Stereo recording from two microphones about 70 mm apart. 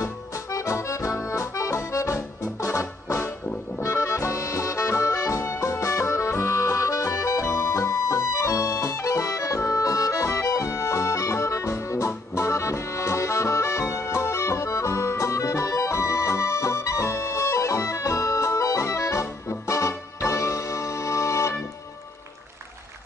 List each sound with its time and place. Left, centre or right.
0.0 s accordion: left
19.5 s music: left